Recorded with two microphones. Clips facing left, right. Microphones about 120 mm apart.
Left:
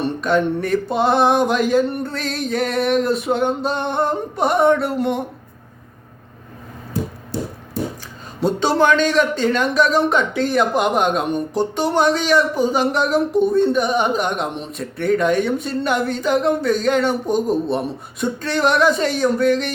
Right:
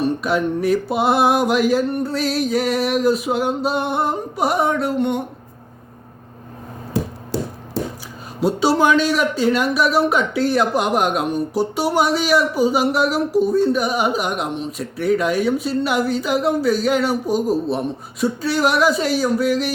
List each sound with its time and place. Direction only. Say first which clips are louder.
0.0 s speech: left 1 dB; 5° right (ahead or behind)
8.4 s speech: even; 5° right (ahead or behind)